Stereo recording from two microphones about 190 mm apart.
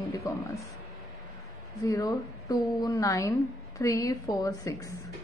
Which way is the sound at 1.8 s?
20° left (ahead or behind).